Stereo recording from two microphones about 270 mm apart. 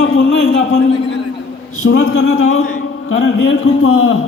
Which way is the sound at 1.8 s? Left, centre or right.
Left.